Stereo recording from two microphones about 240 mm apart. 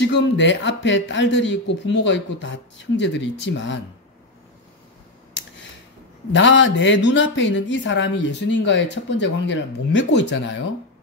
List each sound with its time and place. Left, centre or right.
0.0 s speech: left
6.3 s speech: left